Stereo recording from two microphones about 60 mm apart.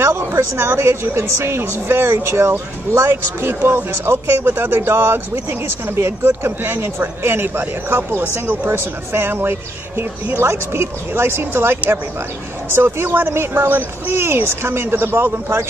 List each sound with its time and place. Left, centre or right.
0.4 s speech: right